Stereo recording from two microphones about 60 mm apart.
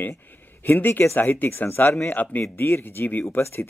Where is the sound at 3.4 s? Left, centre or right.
Left.